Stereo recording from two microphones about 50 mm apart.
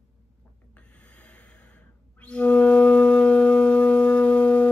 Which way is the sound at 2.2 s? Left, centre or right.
Left.